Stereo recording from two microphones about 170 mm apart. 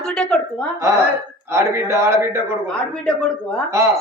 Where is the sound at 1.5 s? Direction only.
15° right (ahead or behind).